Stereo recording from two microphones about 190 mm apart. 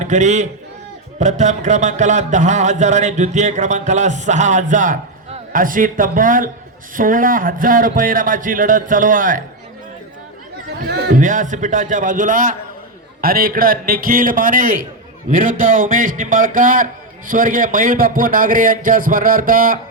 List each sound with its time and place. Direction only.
0.0 s a man's voice: 40° right (ahead or behind)
1.2 s a sound: 40° right (ahead or behind)
6.9 s a man's voice: 45° right (ahead or behind)
10.8 s a man's voice: 45° right (ahead or behind)